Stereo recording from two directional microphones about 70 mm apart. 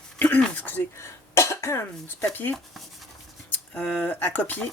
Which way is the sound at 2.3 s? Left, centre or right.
Left.